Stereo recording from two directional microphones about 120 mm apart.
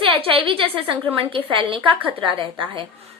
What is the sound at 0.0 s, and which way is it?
A woman's voice, 50° right (ahead or behind).